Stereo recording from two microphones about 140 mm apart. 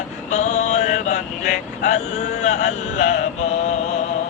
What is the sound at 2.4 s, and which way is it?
Mantra, 60° left (ahead or behind).